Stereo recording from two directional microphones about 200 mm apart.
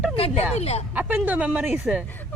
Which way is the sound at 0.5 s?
30° left (ahead or behind).